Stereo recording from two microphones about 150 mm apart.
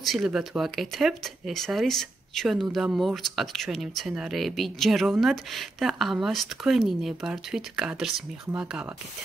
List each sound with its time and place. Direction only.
0.0 s speech: centre (ahead or behind)